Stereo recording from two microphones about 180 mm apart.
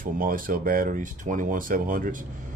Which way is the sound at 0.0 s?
50° right (ahead or behind).